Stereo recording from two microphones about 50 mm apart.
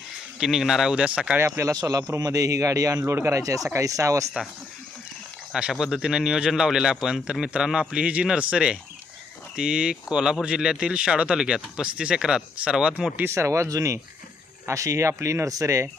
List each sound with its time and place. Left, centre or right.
0.3 s a man's voice: centre
0.9 s speech: right
1.4 s speech: right
5.5 s a man's voice: centre
13.2 s speech: right